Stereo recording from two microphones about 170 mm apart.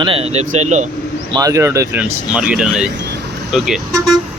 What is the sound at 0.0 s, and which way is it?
Speech, 35° right (ahead or behind).